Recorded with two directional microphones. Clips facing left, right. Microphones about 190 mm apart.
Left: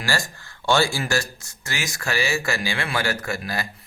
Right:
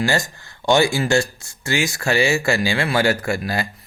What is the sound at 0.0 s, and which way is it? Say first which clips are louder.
Speech: right 6 dB; 20° right (ahead or behind).